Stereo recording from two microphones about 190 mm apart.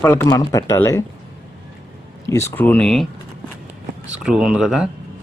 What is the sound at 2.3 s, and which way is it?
Speech, 15° left (ahead or behind).